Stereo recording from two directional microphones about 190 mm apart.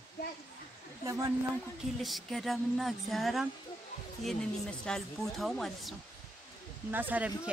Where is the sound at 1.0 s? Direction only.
20° right (ahead or behind).